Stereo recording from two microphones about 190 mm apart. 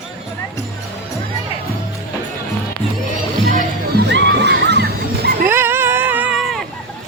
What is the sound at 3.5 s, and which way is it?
Music, 45° right (ahead or behind).